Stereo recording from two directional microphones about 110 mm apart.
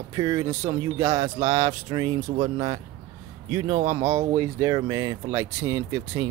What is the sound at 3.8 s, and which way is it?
Speech, 30° right (ahead or behind).